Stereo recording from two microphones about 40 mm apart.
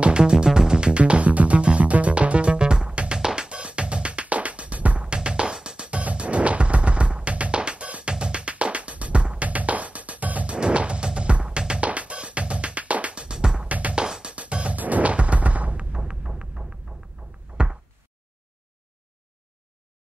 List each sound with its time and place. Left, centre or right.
0.0 s music: right
4.9 s music: right
5.9 s music: right
13.7 s music: right
13.9 s music: right
14.3 s music: right
14.8 s a sound: right
15.9 s music: centre
17.6 s knock: right